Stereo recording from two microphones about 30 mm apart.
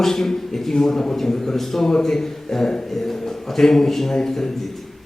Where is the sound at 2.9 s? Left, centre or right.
Centre.